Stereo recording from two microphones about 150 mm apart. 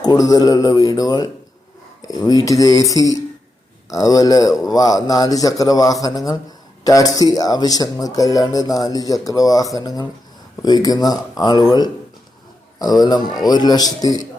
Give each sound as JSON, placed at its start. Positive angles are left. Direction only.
{"t": 0.0, "sound": "speech", "side_deg": 25}